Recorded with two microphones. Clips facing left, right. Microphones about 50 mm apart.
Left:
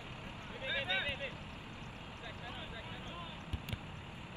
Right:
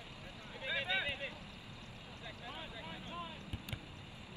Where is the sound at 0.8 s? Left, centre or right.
Centre.